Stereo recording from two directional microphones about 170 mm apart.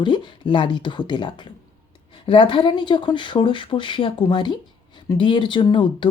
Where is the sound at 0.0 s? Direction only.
25° left (ahead or behind).